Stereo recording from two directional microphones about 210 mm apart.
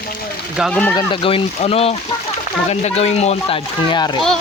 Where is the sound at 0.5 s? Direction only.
Centre (ahead or behind).